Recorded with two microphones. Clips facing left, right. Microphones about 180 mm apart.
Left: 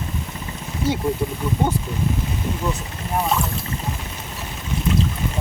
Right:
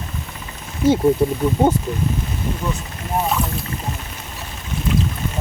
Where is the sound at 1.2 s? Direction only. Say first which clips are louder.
Right 7 dB; 35° right (ahead or behind).